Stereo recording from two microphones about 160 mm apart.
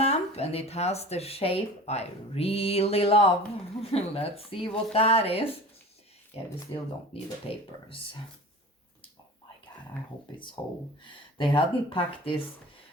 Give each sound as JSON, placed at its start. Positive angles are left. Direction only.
{"t": 0.0, "sound": "speech", "side_deg": 40}
{"t": 7.1, "sound": "speech", "side_deg": 35}
{"t": 10.3, "sound": "speech", "side_deg": 30}